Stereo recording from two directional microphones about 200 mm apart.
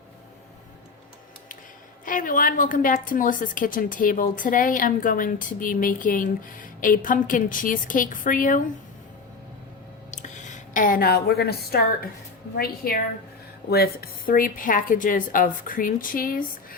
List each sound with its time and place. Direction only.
2.0 s a woman's voice: 40° left (ahead or behind)
10.1 s a woman's voice: 35° left (ahead or behind)